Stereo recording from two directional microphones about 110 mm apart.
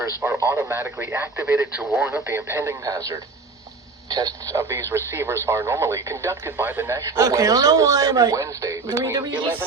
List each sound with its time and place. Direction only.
0.3 s a man's voice: 25° right (ahead or behind)
6.9 s a man's voice: 30° right (ahead or behind)